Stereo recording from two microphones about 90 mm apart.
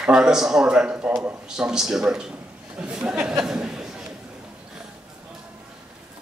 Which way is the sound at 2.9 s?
10° right (ahead or behind).